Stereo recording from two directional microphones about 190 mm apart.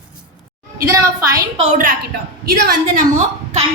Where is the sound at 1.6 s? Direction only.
45° right (ahead or behind).